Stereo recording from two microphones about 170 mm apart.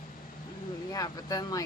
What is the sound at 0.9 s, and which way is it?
Speech, 20° left (ahead or behind).